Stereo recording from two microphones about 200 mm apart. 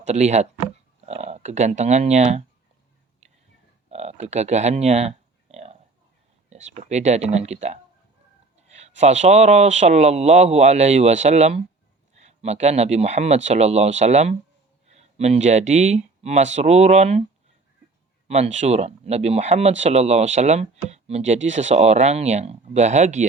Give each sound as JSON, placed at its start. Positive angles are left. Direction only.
{"t": 0.0, "sound": "speech", "side_deg": -35}
{"t": 3.8, "sound": "speech", "side_deg": -35}
{"t": 8.5, "sound": "a sound", "side_deg": -35}
{"t": 9.0, "sound": "speech", "side_deg": -35}
{"t": 18.3, "sound": "speech", "side_deg": -35}